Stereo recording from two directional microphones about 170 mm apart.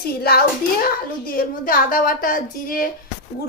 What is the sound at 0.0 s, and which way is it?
A child's voice, 65° left (ahead or behind).